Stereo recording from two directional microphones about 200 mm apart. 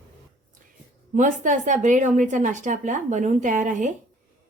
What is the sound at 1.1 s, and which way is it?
A woman's voice, 40° right (ahead or behind).